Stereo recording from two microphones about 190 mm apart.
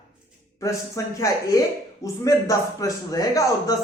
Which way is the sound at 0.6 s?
15° left (ahead or behind).